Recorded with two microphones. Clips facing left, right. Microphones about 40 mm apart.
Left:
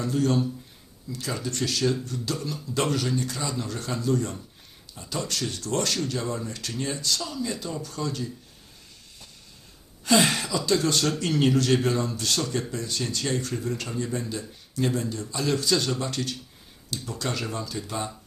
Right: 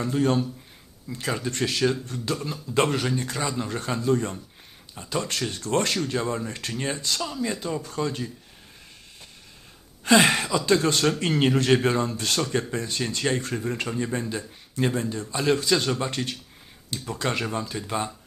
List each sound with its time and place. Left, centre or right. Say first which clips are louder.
0.0 s a man's voice: right 1 dB; right
7.2 s a man's voice: right 2 dB; right
10.0 s a sound: right 3 dB; right
10.7 s a man's voice: right 2 dB; right